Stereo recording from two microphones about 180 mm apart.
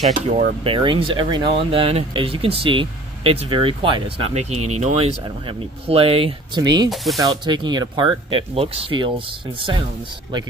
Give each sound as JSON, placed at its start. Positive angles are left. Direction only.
{"t": 0.3, "sound": "speech", "side_deg": -35}